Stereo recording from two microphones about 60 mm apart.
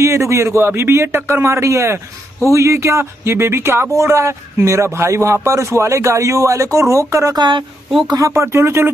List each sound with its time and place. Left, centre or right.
0.0 s speech: right